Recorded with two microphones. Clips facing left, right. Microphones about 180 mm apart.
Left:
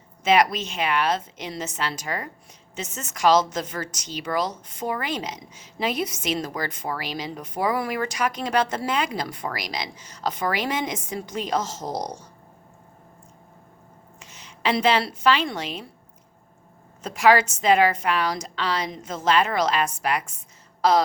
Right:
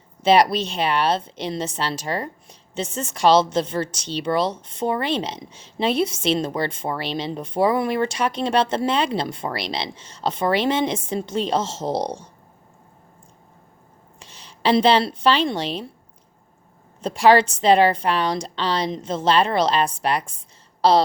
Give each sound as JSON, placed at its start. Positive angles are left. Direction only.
{"t": 0.2, "sound": "a woman's voice", "side_deg": -30}
{"t": 14.2, "sound": "a woman's voice", "side_deg": -35}
{"t": 17.0, "sound": "a woman's voice", "side_deg": -30}